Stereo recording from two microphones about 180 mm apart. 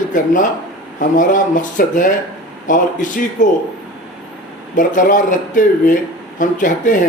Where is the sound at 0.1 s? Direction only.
45° left (ahead or behind).